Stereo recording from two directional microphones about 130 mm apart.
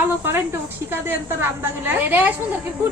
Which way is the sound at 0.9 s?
15° right (ahead or behind).